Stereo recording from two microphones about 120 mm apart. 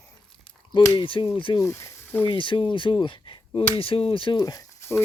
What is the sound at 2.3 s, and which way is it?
Speech, 45° left (ahead or behind).